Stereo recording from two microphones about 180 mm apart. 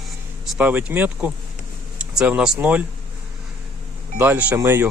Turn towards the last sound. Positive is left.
turn(degrees=-15)  # may be behind; listen again after turning